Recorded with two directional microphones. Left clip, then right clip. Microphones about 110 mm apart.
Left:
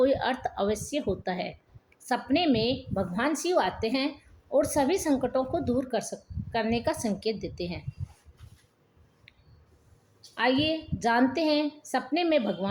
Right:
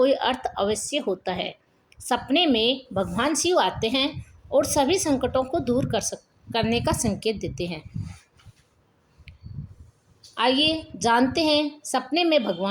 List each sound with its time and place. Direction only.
0.0 s a woman's voice: 55° right (ahead or behind)
9.3 s a sound: 55° right (ahead or behind)
10.3 s a woman's voice: 60° right (ahead or behind)